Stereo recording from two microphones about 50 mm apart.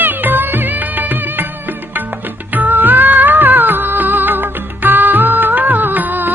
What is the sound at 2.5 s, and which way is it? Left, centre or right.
Music, right.